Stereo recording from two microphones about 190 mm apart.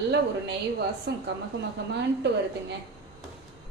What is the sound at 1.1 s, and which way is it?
A woman's voice, 60° right (ahead or behind).